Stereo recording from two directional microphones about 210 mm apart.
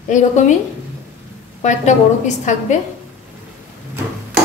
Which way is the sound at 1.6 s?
35° left (ahead or behind).